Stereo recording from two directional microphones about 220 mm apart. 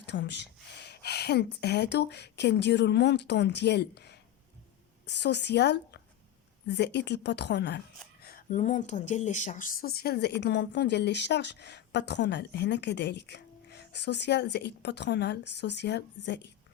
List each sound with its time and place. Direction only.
0.0 s speech: 50° left (ahead or behind)
8.2 s speech: 40° left (ahead or behind)